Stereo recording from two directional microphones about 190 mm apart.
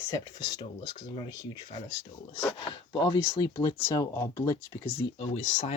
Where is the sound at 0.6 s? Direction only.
30° left (ahead or behind).